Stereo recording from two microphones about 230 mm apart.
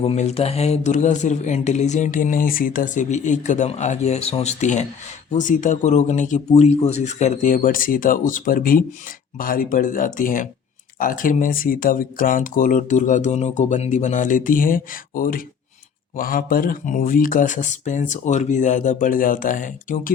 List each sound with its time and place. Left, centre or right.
0.0 s speech: left